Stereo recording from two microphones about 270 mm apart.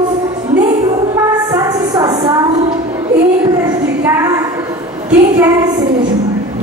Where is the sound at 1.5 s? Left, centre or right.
Centre.